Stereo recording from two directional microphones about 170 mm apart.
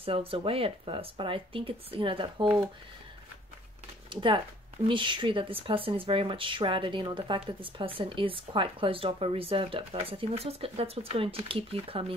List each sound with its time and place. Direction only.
0.0 s speech: 35° right (ahead or behind)
4.1 s speech: 30° right (ahead or behind)